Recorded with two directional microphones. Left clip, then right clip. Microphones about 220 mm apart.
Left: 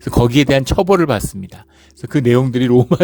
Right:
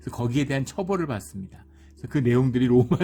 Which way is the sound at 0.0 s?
35° left (ahead or behind).